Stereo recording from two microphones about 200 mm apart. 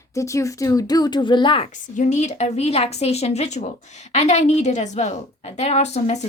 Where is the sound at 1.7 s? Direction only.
40° left (ahead or behind).